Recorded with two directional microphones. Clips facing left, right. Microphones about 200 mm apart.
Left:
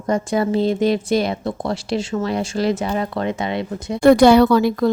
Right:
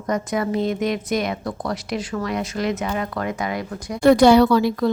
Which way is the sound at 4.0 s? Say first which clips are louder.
Left 2 dB; 55° left (ahead or behind).